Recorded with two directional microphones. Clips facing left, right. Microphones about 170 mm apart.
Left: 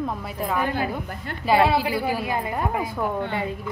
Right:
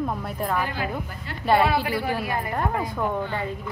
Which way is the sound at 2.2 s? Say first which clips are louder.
Left 1 dB; 20° left (ahead or behind).